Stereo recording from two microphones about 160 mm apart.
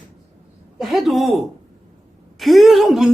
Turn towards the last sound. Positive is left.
turn(degrees=0)  # may be behind; listen again after turning